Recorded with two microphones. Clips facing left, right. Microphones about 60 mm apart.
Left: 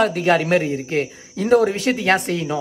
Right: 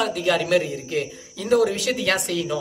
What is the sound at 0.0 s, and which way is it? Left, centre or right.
Speech, left.